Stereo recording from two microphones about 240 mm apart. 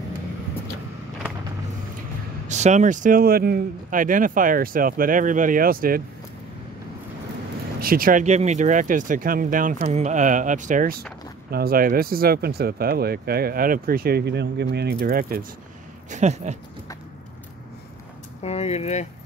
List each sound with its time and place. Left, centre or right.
2.4 s speech: right
7.8 s speech: right
18.4 s speech: left